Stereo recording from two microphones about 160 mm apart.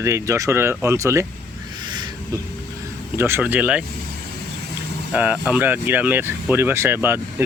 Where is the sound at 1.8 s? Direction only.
30° right (ahead or behind).